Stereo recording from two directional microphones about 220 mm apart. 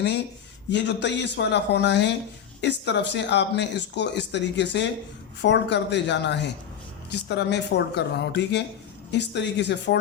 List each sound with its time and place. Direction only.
0.7 s speech: 55° left (ahead or behind)